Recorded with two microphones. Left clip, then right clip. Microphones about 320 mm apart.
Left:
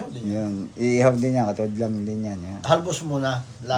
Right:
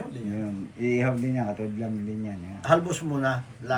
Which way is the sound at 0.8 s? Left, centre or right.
Centre.